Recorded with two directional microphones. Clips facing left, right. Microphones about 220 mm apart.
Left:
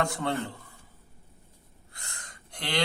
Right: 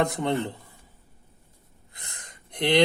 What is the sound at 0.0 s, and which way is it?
Speech, 20° right (ahead or behind).